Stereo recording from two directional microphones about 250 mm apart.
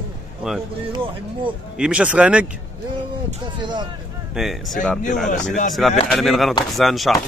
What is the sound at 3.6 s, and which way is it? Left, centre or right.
Speech, centre.